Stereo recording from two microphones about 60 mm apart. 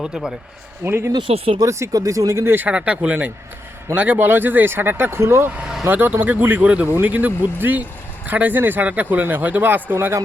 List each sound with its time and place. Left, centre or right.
0.0 s speech: centre
0.9 s speech: right
1.9 s speech: right
2.6 s speech: right
5.8 s speech: right